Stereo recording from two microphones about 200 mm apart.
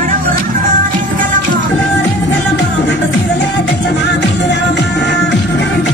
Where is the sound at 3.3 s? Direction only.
60° left (ahead or behind).